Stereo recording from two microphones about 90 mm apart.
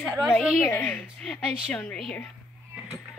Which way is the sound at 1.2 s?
10° left (ahead or behind).